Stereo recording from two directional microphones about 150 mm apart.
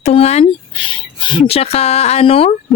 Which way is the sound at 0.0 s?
45° left (ahead or behind).